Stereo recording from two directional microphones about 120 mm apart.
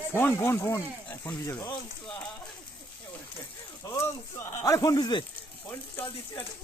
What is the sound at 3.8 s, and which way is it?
Speech, 20° left (ahead or behind).